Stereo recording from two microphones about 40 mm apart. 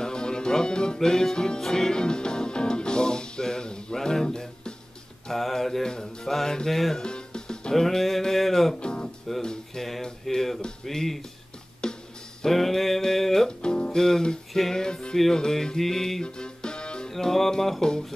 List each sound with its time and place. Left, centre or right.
0.0 s music: centre
5.3 s mantra: centre
7.0 s music: left
7.7 s mantra: centre
8.7 s music: left
9.4 s speech: centre
10.2 s mantra: centre
11.8 s music: centre
12.4 s music: centre
13.5 s music: left
14.5 s music: centre
14.8 s music: centre
17.1 s mantra: centre